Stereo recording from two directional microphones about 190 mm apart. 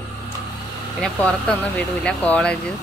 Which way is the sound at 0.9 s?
5° left (ahead or behind).